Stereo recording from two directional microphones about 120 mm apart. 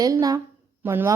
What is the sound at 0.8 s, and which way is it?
Speech, 20° right (ahead or behind).